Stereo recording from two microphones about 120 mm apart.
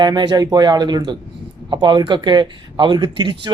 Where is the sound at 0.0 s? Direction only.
40° right (ahead or behind).